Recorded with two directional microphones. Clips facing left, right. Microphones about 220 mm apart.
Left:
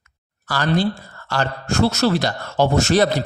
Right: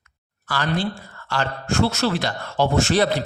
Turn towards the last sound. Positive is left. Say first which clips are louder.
# left 3 dB
turn(degrees=40)  # may be behind; listen again after turning